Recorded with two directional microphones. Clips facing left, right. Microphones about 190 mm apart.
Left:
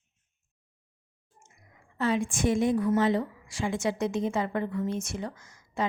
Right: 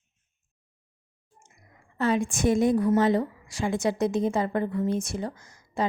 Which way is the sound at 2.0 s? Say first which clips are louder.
Right 2 dB; 45° right (ahead or behind).